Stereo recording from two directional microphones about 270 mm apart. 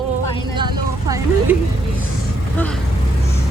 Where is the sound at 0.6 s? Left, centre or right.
Centre.